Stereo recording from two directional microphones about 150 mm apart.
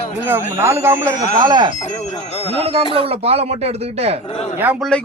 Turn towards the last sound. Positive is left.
turn(degrees=5)  # may be behind; listen again after turning